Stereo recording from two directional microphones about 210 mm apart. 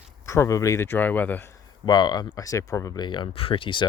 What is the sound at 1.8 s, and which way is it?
Speech, 20° left (ahead or behind).